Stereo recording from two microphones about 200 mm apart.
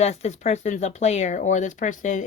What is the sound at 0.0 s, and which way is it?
Speech, 35° left (ahead or behind).